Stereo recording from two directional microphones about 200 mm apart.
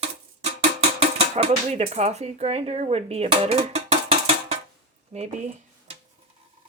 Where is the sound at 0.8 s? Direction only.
30° right (ahead or behind).